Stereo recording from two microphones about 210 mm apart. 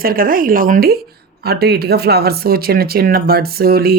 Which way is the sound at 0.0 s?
45° right (ahead or behind).